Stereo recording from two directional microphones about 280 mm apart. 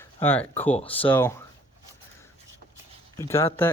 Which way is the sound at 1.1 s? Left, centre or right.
Centre.